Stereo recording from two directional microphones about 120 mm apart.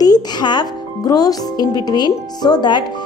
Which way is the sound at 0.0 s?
35° left (ahead or behind).